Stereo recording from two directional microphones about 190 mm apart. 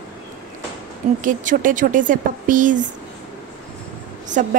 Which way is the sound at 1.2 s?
45° right (ahead or behind).